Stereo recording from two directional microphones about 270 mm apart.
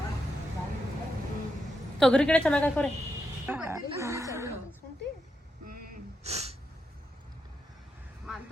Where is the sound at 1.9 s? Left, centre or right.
Centre.